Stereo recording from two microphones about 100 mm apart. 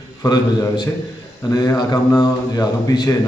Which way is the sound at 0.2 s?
40° left (ahead or behind).